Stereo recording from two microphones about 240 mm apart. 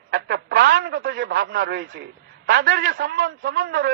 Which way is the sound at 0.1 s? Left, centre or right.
Right.